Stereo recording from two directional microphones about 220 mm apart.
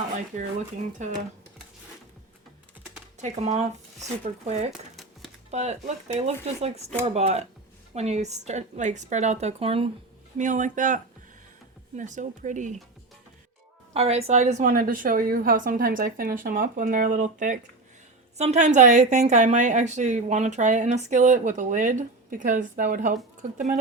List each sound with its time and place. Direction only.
1.0 s a woman's voice: 35° right (ahead or behind)
3.2 s a woman's voice: 30° right (ahead or behind)
4.7 s a sound: centre (ahead or behind)
5.5 s a woman's voice: 30° right (ahead or behind)
13.9 s a woman's voice: 25° right (ahead or behind)